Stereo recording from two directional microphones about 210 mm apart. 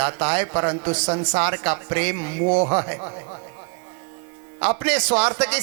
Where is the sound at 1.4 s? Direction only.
10° right (ahead or behind).